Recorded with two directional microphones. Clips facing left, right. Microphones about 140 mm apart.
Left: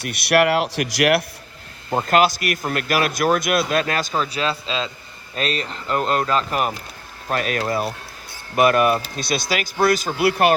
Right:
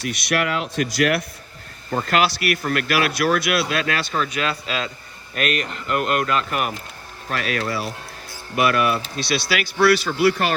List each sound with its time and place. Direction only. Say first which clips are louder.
0.0 s speech: left 5 dB; 60° left (ahead or behind)
1.9 s speech: left 3 dB; 35° left (ahead or behind); by 10.5 s 55° left (ahead or behind)